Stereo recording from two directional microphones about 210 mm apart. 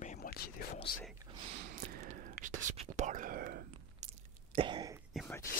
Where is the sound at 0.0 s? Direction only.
40° left (ahead or behind).